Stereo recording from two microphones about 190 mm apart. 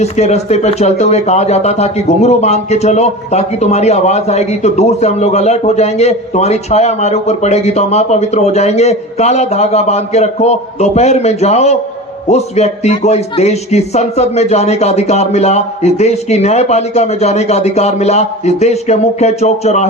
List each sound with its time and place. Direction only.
0.0 s speech: 35° left (ahead or behind)